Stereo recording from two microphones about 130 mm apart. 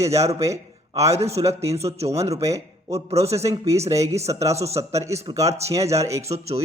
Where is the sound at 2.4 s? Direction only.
25° right (ahead or behind).